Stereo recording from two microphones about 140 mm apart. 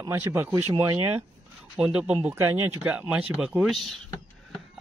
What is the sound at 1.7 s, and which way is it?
Speech, 5° right (ahead or behind).